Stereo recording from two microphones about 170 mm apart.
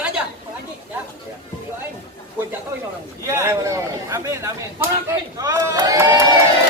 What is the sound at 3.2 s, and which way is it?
Speech, 15° right (ahead or behind).